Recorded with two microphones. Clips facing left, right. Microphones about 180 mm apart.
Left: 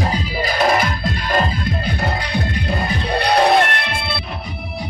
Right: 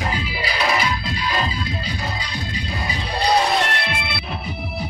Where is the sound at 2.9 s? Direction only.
60° left (ahead or behind).